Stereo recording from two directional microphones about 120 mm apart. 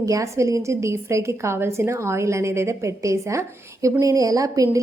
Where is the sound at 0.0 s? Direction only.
25° right (ahead or behind).